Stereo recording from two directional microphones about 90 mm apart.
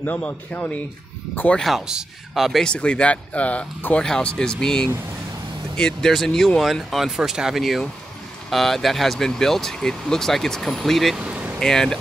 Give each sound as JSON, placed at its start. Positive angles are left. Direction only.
{"t": 0.0, "sound": "speech", "side_deg": 15}
{"t": 1.6, "sound": "speech", "side_deg": -5}
{"t": 2.6, "sound": "speech", "side_deg": 10}
{"t": 11.6, "sound": "speech", "side_deg": 5}